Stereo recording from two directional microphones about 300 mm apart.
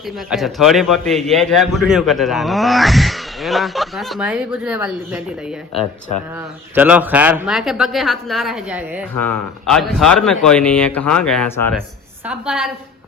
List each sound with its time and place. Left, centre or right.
0.0 s a man's voice: centre